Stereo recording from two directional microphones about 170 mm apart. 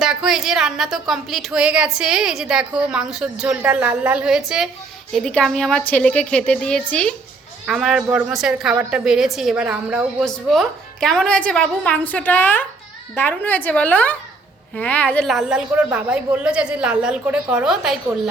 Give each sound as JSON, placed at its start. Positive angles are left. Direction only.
{"t": 0.0, "sound": "a woman's voice", "side_deg": -5}